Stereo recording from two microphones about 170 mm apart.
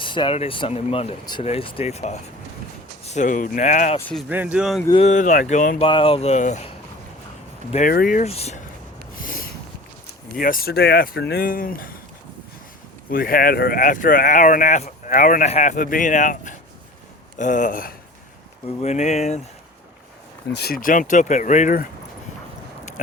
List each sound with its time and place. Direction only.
0.0 s speech: 30° left (ahead or behind)
4.3 s speech: 10° right (ahead or behind)
4.9 s speech: 45° left (ahead or behind)
5.8 s speech: 30° left (ahead or behind)
7.7 s speech: 45° left (ahead or behind)
8.3 s speech: 40° left (ahead or behind)
9.2 s a sound: 55° left (ahead or behind)
10.3 s speech: 55° left (ahead or behind)
13.1 s speech: 55° left (ahead or behind)
18.8 s speech: 40° left (ahead or behind)
20.6 s speech: 60° left (ahead or behind)